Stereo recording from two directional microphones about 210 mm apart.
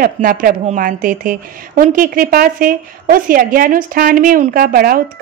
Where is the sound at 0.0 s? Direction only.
40° right (ahead or behind).